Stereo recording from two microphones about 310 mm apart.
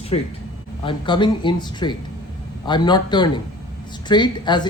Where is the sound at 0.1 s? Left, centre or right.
Centre.